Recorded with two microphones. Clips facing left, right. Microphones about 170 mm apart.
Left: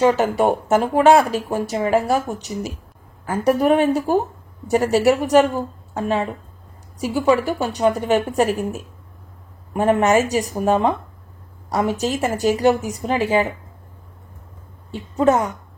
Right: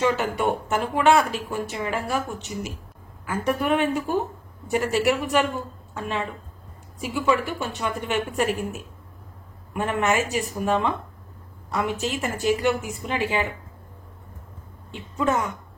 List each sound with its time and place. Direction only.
0.0 s speech: 40° left (ahead or behind)
14.9 s speech: 40° left (ahead or behind)